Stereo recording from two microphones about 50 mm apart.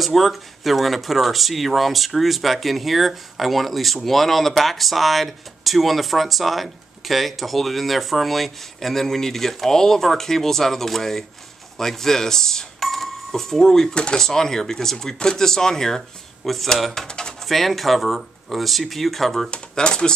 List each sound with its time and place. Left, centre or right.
0.0 s speech: centre
19.5 s speech: centre